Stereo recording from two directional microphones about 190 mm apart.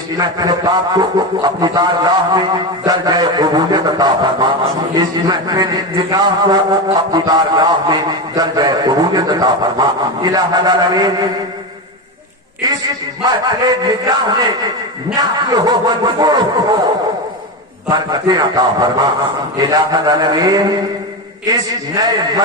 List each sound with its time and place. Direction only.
0.2 s a man's voice: 20° right (ahead or behind)
12.6 s a man's voice: 20° right (ahead or behind)
17.8 s a man's voice: 20° right (ahead or behind)